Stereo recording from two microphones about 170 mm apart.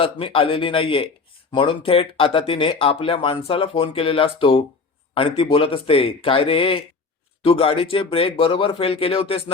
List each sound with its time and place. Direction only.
0.0 s speech: 30° left (ahead or behind)